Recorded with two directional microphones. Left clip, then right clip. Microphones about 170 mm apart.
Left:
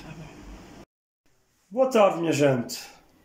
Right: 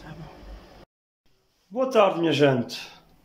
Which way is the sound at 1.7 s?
5° left (ahead or behind).